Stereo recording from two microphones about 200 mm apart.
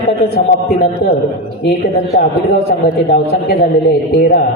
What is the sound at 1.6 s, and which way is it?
A man's voice, 50° left (ahead or behind).